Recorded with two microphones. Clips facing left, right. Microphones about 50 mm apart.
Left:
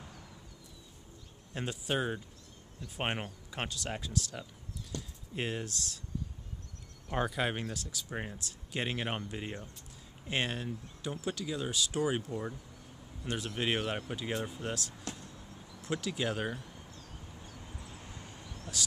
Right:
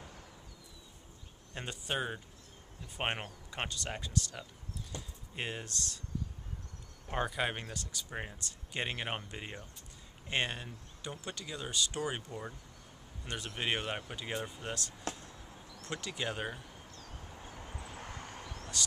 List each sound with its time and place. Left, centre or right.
1.5 s speech: centre
4.9 s clip-clop: right
5.3 s speech: centre
7.2 s speech: centre
15.1 s vehicle: centre
15.7 s speech: centre
17.6 s vehicle: right
17.9 s vehicle: right
18.8 s speech: centre